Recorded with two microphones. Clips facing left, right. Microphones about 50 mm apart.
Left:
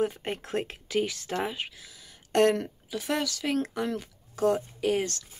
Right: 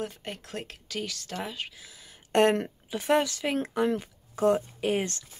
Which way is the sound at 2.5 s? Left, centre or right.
Right.